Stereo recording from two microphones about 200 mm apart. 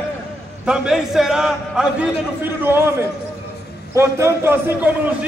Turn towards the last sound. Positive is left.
turn(degrees=-10)  # may be behind; listen again after turning